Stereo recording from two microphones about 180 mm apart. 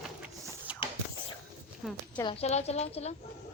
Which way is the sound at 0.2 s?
5° right (ahead or behind).